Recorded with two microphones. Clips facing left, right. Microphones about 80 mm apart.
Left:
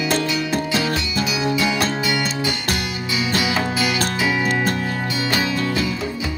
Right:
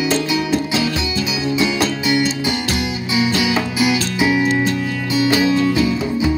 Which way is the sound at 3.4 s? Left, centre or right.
Centre.